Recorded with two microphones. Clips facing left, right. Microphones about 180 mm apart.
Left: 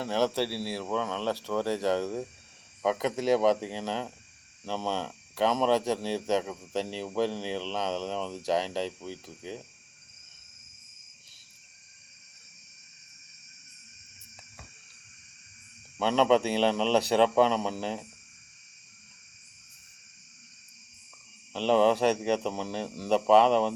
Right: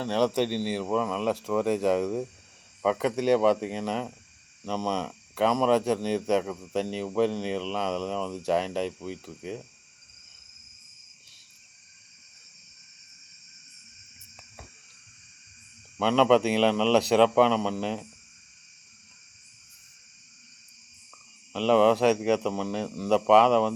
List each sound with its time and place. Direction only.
0.3 s speech: 10° right (ahead or behind)
7.9 s speech: 35° left (ahead or behind)
8.1 s speech: centre (ahead or behind)
16.0 s speech: centre (ahead or behind)
21.5 s speech: centre (ahead or behind)